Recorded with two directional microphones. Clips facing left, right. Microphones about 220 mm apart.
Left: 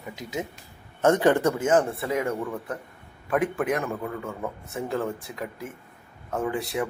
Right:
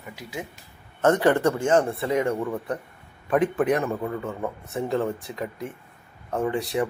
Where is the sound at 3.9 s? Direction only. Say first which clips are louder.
Right 3 dB; 15° right (ahead or behind).